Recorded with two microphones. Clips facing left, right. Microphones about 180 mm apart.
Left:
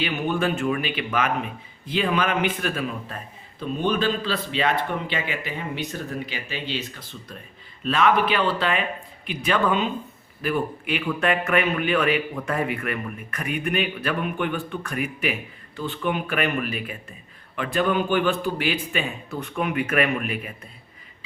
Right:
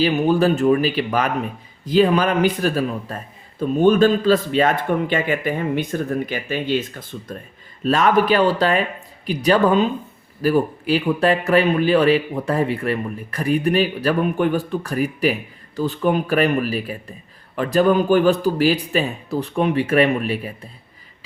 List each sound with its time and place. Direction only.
0.0 s a man's voice: 35° right (ahead or behind)